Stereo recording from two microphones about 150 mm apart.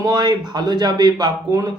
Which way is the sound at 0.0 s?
25° right (ahead or behind).